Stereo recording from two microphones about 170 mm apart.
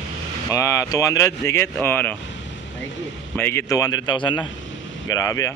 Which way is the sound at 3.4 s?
15° left (ahead or behind).